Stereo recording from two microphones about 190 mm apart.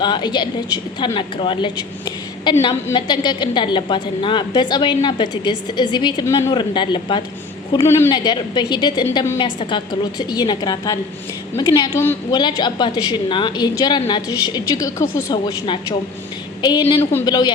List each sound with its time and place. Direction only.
0.0 s a woman's voice: 25° left (ahead or behind)
9.4 s a woman's voice: 25° left (ahead or behind)
17.0 s a woman's voice: 15° left (ahead or behind)